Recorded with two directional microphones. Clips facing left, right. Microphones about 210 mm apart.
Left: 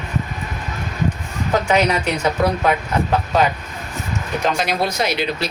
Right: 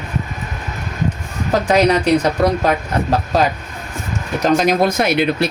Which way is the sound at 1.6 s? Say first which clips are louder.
Right 5 dB; 35° right (ahead or behind).